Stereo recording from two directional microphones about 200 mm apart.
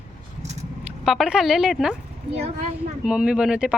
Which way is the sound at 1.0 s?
Centre (ahead or behind).